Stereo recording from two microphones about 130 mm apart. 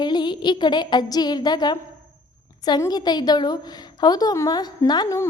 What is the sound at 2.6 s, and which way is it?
A child's voice, 30° left (ahead or behind).